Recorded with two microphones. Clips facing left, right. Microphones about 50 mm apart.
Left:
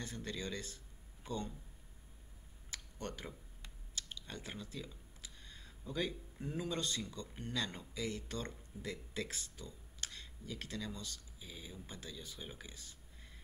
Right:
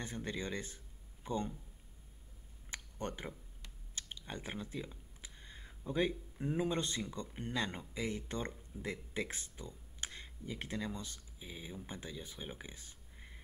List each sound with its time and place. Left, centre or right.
0.0 s speech: right
2.7 s a sound: right
3.9 s computer keyboard: right
6.4 s speech: right